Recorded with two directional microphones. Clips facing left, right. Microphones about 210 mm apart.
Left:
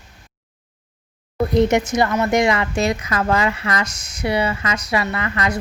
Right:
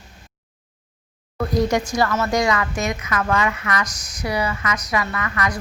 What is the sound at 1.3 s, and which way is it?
Speech, 25° left (ahead or behind).